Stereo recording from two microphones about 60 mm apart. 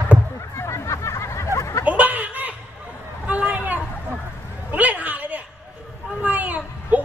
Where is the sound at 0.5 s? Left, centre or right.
Left.